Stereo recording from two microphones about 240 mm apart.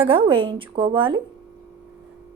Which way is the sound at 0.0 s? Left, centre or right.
Right.